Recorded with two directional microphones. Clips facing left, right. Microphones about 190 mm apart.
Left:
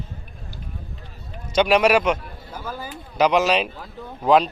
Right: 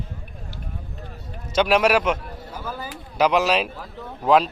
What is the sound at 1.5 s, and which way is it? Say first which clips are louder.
Speech: left 1 dB; 5° right (ahead or behind).